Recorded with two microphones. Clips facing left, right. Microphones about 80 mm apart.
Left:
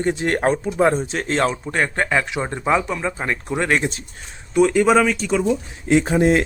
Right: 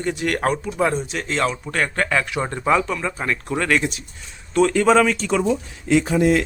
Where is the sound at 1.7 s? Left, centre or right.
Left.